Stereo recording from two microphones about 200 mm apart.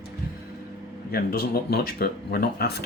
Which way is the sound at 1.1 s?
50° left (ahead or behind).